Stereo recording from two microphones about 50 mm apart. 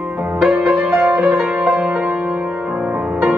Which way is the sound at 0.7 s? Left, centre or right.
Right.